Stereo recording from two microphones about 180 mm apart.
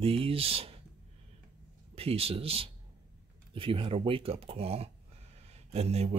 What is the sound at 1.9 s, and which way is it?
Speech, 35° right (ahead or behind).